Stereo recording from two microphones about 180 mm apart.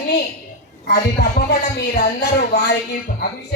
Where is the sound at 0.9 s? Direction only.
60° left (ahead or behind).